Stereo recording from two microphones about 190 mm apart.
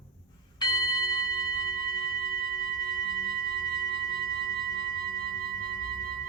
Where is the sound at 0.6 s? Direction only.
20° left (ahead or behind).